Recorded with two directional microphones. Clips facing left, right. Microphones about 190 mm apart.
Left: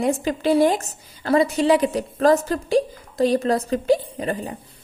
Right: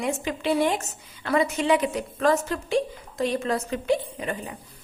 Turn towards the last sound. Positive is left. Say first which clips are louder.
# left 5 dB
turn(degrees=35)  # may be behind; listen again after turning